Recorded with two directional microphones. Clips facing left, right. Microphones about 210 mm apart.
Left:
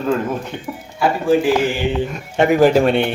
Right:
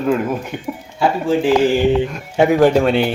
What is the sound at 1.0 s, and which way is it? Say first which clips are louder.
Speech: left 1 dB; 25° right (ahead or behind).